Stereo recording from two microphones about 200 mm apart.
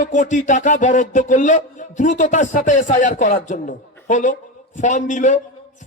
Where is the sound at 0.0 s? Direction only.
40° left (ahead or behind).